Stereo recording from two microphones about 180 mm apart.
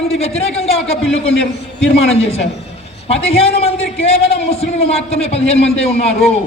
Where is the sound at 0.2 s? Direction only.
35° left (ahead or behind).